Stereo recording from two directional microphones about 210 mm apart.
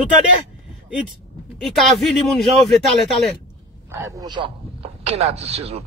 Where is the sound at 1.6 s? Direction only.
Centre (ahead or behind).